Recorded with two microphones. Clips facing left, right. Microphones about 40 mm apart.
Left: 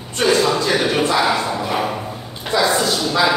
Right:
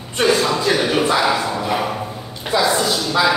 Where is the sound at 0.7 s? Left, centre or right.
Centre.